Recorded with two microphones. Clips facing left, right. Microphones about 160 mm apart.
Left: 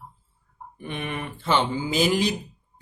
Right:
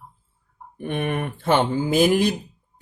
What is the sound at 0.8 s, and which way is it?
Speech, 55° right (ahead or behind).